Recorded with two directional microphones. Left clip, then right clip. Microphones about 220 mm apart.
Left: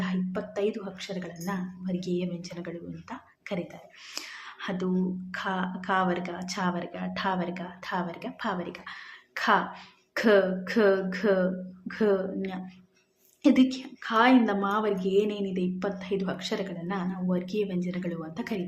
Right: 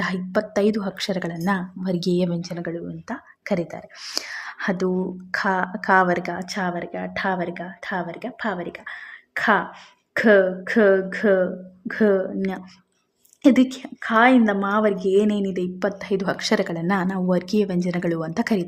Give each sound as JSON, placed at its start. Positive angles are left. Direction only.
{"t": 0.0, "sound": "a woman's voice", "side_deg": -45}